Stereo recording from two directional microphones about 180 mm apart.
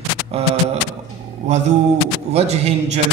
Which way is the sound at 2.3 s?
35° right (ahead or behind).